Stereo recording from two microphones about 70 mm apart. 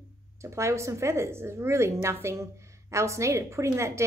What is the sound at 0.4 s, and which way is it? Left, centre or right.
A woman's voice, right.